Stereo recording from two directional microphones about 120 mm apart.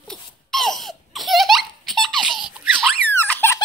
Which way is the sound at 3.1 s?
15° left (ahead or behind).